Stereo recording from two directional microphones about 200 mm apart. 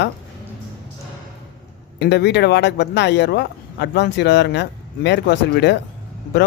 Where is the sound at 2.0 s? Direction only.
55° left (ahead or behind).